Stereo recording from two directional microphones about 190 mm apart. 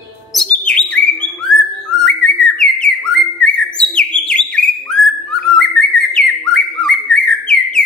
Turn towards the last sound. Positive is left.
turn(degrees=5)  # may be behind; listen again after turning